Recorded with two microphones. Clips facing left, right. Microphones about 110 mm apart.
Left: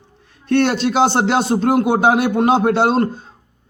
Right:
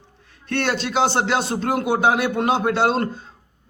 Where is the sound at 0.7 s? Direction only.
50° left (ahead or behind).